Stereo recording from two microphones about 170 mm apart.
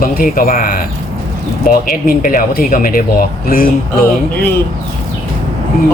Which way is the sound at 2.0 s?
55° left (ahead or behind).